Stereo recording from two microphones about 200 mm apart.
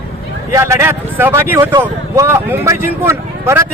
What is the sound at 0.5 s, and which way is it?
Speech, 15° right (ahead or behind).